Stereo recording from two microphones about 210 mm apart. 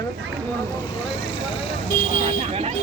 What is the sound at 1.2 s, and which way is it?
Speech, 25° left (ahead or behind).